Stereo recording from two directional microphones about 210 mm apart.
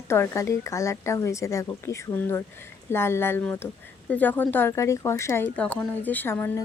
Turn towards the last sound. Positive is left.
turn(degrees=10)  # may be behind; listen again after turning